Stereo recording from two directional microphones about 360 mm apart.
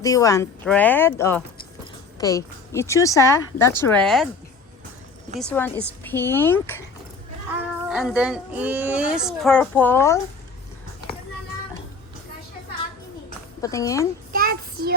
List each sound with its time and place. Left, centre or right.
0.0 s speech: centre
5.4 s speech: centre
7.9 s speech: centre
13.6 s speech: centre
14.3 s child singing: right